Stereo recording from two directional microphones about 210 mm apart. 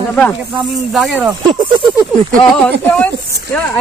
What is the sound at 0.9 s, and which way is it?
Speech, centre (ahead or behind).